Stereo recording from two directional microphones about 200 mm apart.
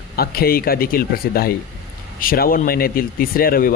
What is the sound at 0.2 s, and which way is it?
Speech, 50° left (ahead or behind).